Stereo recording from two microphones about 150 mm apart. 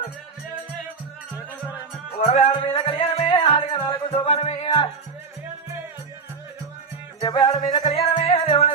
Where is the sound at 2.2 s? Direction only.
45° left (ahead or behind).